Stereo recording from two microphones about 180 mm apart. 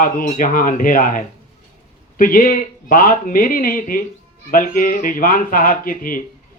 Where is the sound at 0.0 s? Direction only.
50° left (ahead or behind).